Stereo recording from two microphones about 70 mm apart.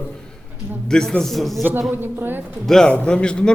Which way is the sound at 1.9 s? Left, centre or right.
Right.